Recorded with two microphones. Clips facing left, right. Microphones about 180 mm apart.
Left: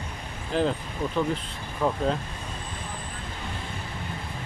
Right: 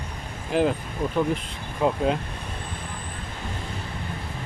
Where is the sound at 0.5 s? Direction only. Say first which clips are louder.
Right 3 dB; 10° right (ahead or behind).